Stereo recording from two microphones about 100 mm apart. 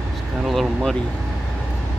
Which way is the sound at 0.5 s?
Centre (ahead or behind).